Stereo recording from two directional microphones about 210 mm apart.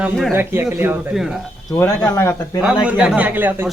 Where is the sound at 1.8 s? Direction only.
15° left (ahead or behind).